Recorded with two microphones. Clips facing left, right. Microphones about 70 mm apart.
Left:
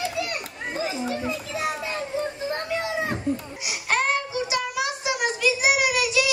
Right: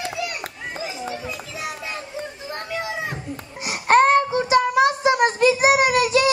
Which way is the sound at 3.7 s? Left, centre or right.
Right.